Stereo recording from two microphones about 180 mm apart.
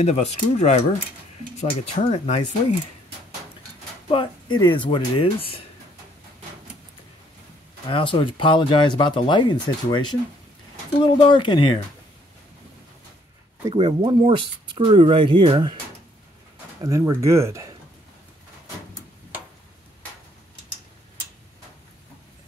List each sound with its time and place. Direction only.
0.0 s speech: 35° left (ahead or behind)
4.1 s speech: 25° left (ahead or behind)
7.9 s speech: 25° left (ahead or behind)
11.2 s speech: 25° left (ahead or behind)
13.7 s speech: 30° right (ahead or behind)
16.8 s speech: 15° right (ahead or behind)